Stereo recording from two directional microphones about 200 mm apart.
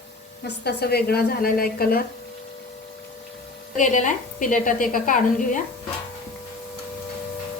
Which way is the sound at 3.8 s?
40° left (ahead or behind).